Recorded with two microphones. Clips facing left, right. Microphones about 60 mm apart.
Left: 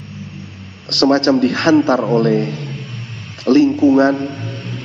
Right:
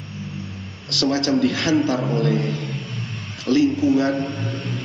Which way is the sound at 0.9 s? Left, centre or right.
Left.